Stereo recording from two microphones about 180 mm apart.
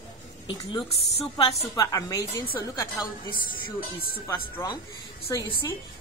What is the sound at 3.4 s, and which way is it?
Speech, 55° left (ahead or behind).